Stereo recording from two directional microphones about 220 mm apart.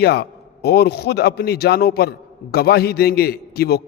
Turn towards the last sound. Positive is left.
turn(degrees=45)  # may be behind; listen again after turning